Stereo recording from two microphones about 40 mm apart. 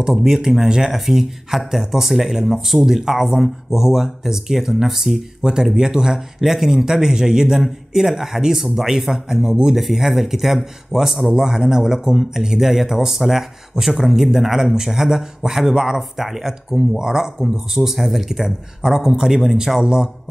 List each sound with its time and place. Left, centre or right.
0.1 s speech: centre